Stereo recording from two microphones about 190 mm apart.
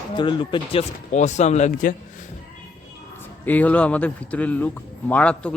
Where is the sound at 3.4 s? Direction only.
10° left (ahead or behind).